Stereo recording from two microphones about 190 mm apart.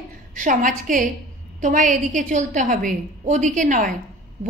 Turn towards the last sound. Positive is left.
turn(degrees=-40)  # may be behind; listen again after turning